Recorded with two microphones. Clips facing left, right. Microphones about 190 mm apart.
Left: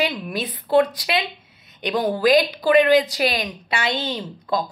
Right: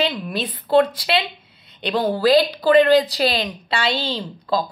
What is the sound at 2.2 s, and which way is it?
A woman's voice, 15° left (ahead or behind).